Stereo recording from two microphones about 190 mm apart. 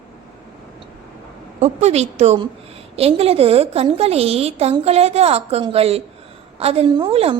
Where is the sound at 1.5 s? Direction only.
35° right (ahead or behind).